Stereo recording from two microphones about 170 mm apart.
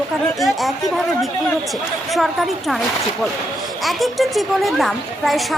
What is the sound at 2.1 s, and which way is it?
Speech, centre (ahead or behind).